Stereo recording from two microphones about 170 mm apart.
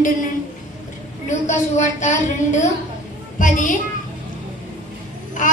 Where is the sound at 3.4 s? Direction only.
50° left (ahead or behind).